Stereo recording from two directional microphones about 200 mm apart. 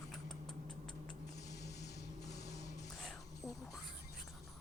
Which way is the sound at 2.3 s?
15° left (ahead or behind).